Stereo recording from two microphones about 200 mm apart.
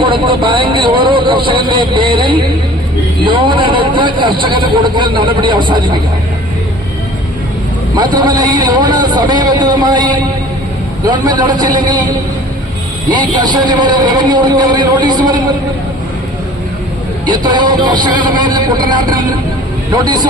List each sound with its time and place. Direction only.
0.0 s vehicle: 25° right (ahead or behind)
3.2 s a man's voice: 25° right (ahead or behind)
7.9 s a man's voice: 20° right (ahead or behind)
13.3 s a man's voice: 20° right (ahead or behind)
17.2 s a man's voice: 20° right (ahead or behind)